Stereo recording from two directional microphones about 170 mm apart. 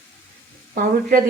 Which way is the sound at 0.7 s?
55° right (ahead or behind).